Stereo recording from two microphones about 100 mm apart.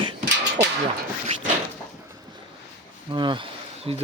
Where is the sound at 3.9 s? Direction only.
65° right (ahead or behind).